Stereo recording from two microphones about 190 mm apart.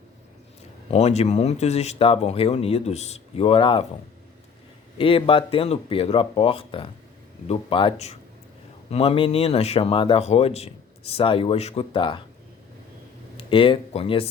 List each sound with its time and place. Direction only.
0.9 s speech: 35° left (ahead or behind)
4.9 s speech: 30° left (ahead or behind)
13.3 s speech: 30° left (ahead or behind)